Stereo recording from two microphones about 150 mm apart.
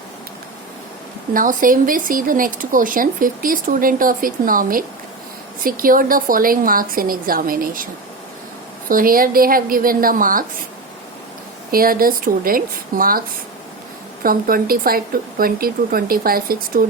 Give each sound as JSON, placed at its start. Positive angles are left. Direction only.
{"t": 1.3, "sound": "speech", "side_deg": -65}
{"t": 8.9, "sound": "speech", "side_deg": -70}
{"t": 11.7, "sound": "speech", "side_deg": -75}
{"t": 14.3, "sound": "speech", "side_deg": -75}